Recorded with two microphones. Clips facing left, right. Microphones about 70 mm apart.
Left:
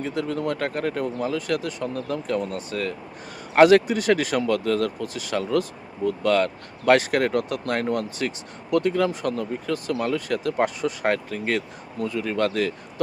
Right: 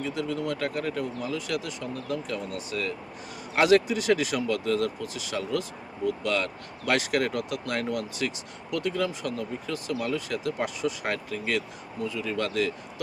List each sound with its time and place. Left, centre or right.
0.0 s speech: left